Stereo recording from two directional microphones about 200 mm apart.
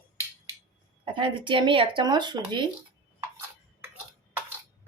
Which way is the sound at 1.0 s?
25° right (ahead or behind).